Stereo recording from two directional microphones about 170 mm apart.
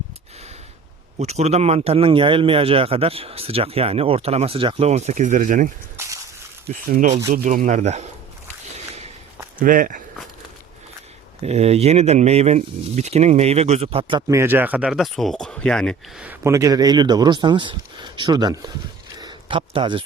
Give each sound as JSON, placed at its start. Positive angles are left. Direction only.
{"t": 1.2, "sound": "speech", "side_deg": -40}
{"t": 6.0, "sound": "a sound", "side_deg": -20}
{"t": 6.9, "sound": "speech", "side_deg": -45}
{"t": 9.6, "sound": "speech", "side_deg": -55}
{"t": 11.4, "sound": "speech", "side_deg": -40}
{"t": 16.2, "sound": "speech", "side_deg": -15}